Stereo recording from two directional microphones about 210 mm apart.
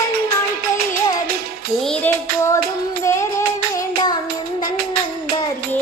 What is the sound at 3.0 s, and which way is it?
Music, 15° left (ahead or behind).